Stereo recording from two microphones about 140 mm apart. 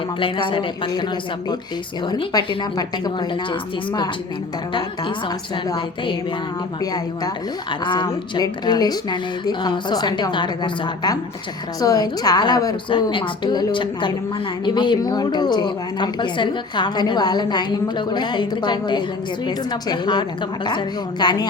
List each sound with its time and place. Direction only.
0.2 s a woman's voice: 35° left (ahead or behind)
5.6 s a sound: 30° left (ahead or behind)
6.9 s a woman's voice: 30° left (ahead or behind)